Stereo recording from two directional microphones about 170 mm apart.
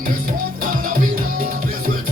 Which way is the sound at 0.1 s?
55° right (ahead or behind).